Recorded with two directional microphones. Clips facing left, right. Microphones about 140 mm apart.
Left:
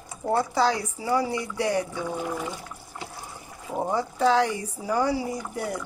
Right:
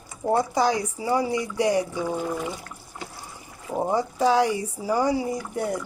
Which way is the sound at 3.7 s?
15° right (ahead or behind).